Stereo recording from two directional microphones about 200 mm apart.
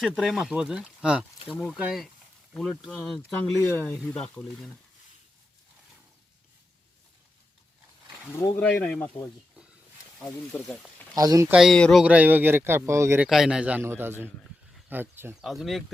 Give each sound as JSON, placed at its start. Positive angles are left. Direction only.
{"t": 0.0, "sound": "speech", "side_deg": 0}
{"t": 3.3, "sound": "speech", "side_deg": 10}
{"t": 8.4, "sound": "speech", "side_deg": 10}
{"t": 11.1, "sound": "speech", "side_deg": -20}
{"t": 11.5, "sound": "speech", "side_deg": 0}
{"t": 15.4, "sound": "speech", "side_deg": 0}